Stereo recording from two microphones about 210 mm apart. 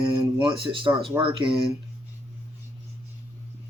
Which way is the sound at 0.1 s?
25° right (ahead or behind).